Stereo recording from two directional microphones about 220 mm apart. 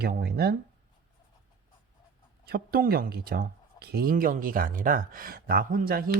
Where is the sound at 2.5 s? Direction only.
45° right (ahead or behind).